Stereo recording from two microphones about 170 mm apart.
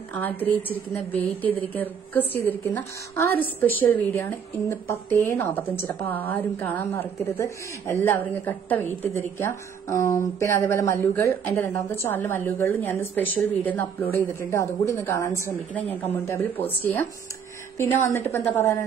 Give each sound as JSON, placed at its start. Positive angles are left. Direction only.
{"t": 0.2, "sound": "a woman's voice", "side_deg": 10}
{"t": 18.0, "sound": "a woman's voice", "side_deg": 15}